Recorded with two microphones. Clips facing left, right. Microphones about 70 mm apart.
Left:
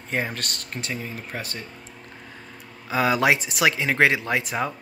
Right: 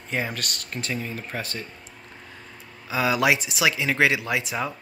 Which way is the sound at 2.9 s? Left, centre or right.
Left.